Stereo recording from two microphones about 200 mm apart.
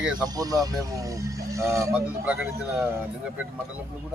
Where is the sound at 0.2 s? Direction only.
20° right (ahead or behind).